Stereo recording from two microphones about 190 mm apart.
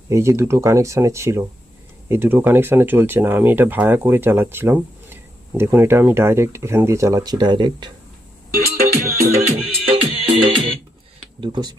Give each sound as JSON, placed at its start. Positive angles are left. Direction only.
{"t": 0.1, "sound": "speech", "side_deg": -15}
{"t": 8.5, "sound": "music", "side_deg": -45}
{"t": 9.0, "sound": "music", "side_deg": -15}
{"t": 9.8, "sound": "music", "side_deg": -30}
{"t": 11.3, "sound": "speech", "side_deg": -25}